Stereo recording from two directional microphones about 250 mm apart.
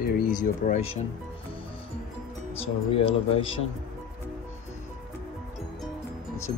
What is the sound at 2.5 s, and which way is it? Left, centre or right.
Speech, left.